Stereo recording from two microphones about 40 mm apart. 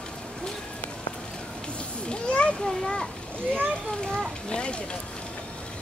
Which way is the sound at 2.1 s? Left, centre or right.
Left.